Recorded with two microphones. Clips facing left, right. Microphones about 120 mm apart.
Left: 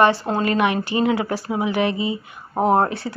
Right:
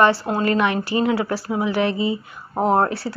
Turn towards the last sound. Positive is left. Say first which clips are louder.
# even
turn(degrees=20)  # may be behind; listen again after turning